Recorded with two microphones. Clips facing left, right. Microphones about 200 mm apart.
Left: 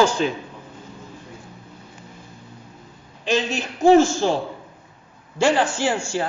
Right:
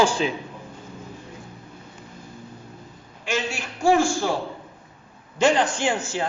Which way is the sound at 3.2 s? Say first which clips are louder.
Left 5 dB; 20° left (ahead or behind).